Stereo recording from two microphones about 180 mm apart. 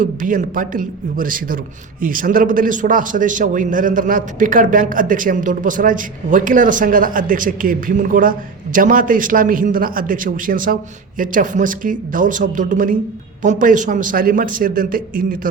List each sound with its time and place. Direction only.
0.0 s a man's voice: 50° right (ahead or behind)